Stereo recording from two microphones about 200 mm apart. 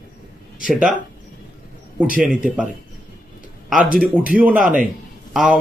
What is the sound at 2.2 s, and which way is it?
Speech, 5° right (ahead or behind).